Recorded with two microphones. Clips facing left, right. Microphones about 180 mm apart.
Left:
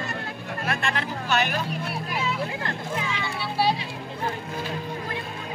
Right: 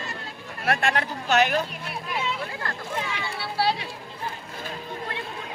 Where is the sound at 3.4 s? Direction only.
15° left (ahead or behind).